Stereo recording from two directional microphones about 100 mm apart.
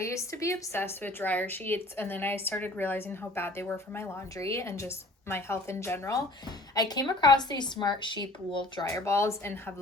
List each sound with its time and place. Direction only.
0.0 s a woman's voice: 30° left (ahead or behind)
6.7 s a woman's voice: 40° left (ahead or behind)
8.8 s a woman's voice: 30° left (ahead or behind)